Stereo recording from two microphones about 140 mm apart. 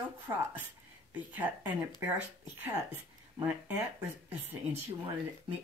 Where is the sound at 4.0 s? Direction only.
15° right (ahead or behind).